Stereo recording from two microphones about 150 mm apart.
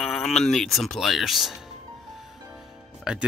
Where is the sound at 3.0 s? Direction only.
5° right (ahead or behind).